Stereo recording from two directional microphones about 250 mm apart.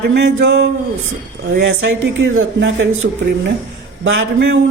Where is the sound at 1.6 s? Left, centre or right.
Right.